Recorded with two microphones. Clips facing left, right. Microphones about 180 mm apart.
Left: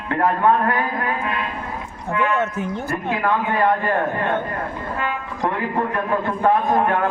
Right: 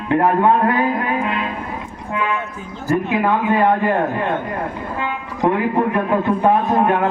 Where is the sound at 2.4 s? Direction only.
75° left (ahead or behind).